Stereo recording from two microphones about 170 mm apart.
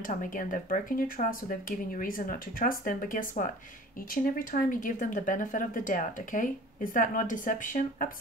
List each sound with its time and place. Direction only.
0.0 s speech: 50° left (ahead or behind)